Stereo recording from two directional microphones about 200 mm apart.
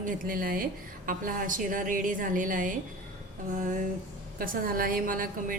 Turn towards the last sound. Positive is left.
turn(degrees=-45)  # may be behind; listen again after turning